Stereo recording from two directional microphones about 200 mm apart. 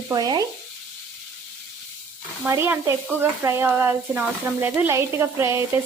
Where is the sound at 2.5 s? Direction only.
10° right (ahead or behind).